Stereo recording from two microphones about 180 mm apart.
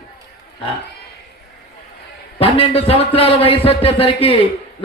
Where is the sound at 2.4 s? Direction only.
35° left (ahead or behind).